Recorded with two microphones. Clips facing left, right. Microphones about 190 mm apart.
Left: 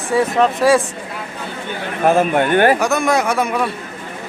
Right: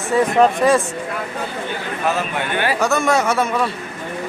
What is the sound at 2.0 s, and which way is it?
Speech, 50° left (ahead or behind).